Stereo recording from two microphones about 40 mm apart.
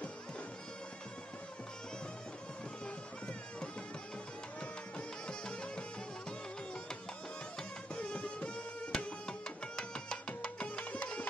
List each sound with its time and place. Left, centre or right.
4.6 s music: left
7.9 s music: left
8.9 s music: centre
10.8 s music: left